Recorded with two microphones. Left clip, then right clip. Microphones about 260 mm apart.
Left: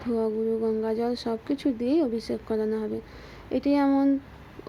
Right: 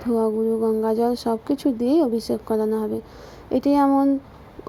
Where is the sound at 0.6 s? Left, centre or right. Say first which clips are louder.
Right 6 dB; centre.